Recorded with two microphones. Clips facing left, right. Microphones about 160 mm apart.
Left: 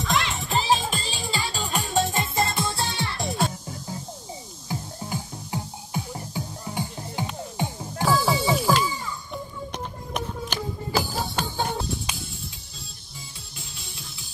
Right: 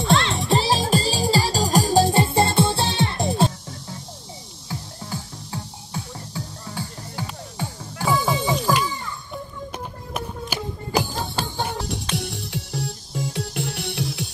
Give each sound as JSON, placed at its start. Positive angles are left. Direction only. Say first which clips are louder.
{"t": 0.0, "sound": "music", "louder": "right 6 dB", "side_deg": -30}
{"t": 4.6, "sound": "music", "louder": "left 1 dB", "side_deg": 15}
{"t": 8.0, "sound": "music", "louder": "even", "side_deg": 0}
{"t": 8.8, "sound": "children playing", "louder": "even", "side_deg": 5}
{"t": 10.5, "sound": "music", "louder": "right 3 dB", "side_deg": -10}
{"t": 11.4, "sound": "music", "louder": "right 2 dB", "side_deg": -30}
{"t": 12.2, "sound": "music", "louder": "right 9 dB", "side_deg": -70}